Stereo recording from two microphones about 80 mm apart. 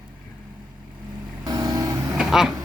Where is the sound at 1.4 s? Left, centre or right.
Right.